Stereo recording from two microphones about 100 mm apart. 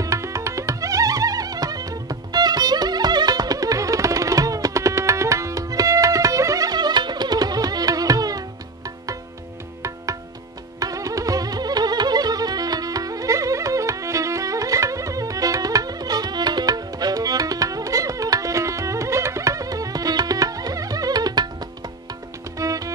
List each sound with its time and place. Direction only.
0.0 s music: 30° right (ahead or behind)
10.8 s music: 35° right (ahead or behind)
22.6 s music: 35° right (ahead or behind)